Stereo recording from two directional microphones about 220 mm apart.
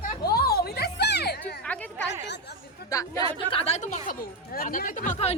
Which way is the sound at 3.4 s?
25° left (ahead or behind).